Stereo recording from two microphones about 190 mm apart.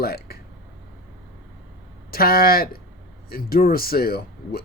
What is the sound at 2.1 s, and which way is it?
Speech, 50° left (ahead or behind).